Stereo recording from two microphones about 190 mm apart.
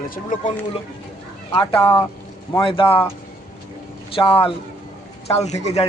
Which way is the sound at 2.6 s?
25° left (ahead or behind).